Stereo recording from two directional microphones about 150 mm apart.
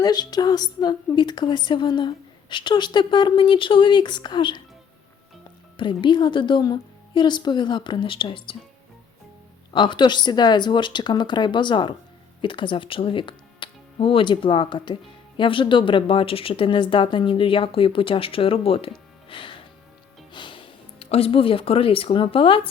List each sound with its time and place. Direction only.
0.0 s a woman's voice: 25° left (ahead or behind)
5.7 s a woman's voice: 35° left (ahead or behind)
9.7 s a woman's voice: 30° left (ahead or behind)